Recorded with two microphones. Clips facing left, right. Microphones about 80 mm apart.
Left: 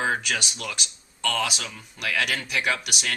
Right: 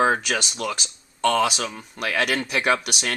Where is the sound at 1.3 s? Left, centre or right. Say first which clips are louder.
Right 5 dB; right.